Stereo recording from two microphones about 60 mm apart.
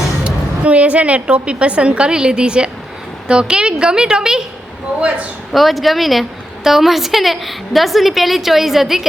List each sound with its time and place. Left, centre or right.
0.3 s a woman's voice: right
4.9 s a woman's voice: right
5.5 s a woman's voice: centre